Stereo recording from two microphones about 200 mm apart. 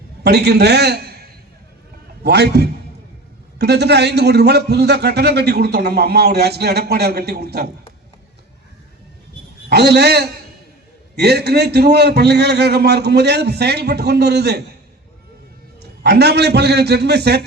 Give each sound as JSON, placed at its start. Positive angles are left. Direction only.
{"t": 0.2, "sound": "a man's voice", "side_deg": -55}
{"t": 9.6, "sound": "speech", "side_deg": -55}
{"t": 15.8, "sound": "speech", "side_deg": -55}